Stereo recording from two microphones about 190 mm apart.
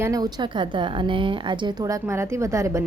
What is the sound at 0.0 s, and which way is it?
A woman's voice, 20° right (ahead or behind).